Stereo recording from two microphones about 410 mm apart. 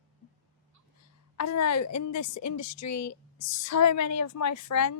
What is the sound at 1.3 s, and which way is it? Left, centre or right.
A woman's voice, left.